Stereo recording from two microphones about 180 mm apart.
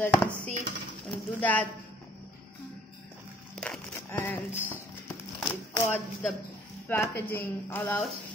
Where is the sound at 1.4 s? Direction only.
10° left (ahead or behind).